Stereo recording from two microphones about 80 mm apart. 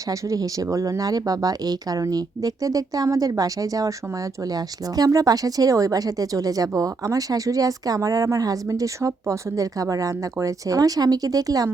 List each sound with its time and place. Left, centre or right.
0.1 s speech: right